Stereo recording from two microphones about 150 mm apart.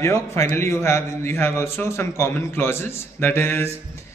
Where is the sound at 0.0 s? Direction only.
20° left (ahead or behind).